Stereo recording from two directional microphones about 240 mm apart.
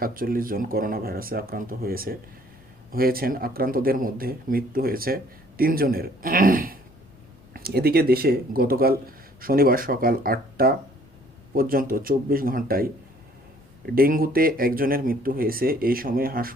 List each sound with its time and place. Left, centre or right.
0.0 s speech: right